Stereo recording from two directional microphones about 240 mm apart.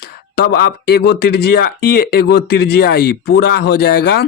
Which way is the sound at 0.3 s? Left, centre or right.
Left.